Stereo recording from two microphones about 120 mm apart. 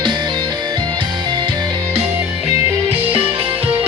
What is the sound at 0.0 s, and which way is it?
Music, 40° right (ahead or behind).